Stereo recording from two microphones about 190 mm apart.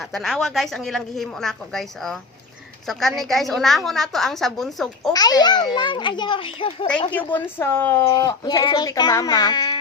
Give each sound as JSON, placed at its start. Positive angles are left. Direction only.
{"t": 0.0, "sound": "a woman's voice", "side_deg": 0}
{"t": 5.1, "sound": "a child's voice", "side_deg": 20}
{"t": 7.3, "sound": "a child's voice", "side_deg": 10}